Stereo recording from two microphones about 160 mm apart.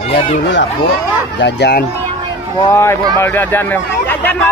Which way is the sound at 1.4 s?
90° left.